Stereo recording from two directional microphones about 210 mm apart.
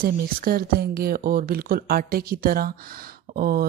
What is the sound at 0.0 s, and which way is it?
Mantra, 45° right (ahead or behind).